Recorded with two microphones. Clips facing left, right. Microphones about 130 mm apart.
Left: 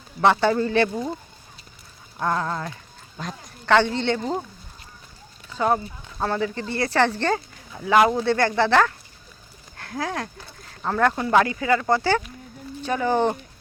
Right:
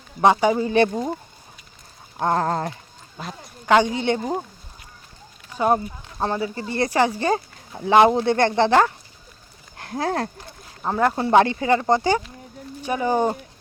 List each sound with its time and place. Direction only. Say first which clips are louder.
0.2 s speech: right 2 dB; 15° right (ahead or behind)
2.1 s speech: right 4 dB; 35° right (ahead or behind)
3.7 s speech: right 1 dB; 15° right (ahead or behind)
5.5 s horse: right 2 dB; 15° right (ahead or behind)
5.7 s speech: right 2 dB; 20° right (ahead or behind)
7.3 s speech: right 3 dB; 30° right (ahead or behind)
10.8 s speech: right 1 dB; 15° right (ahead or behind)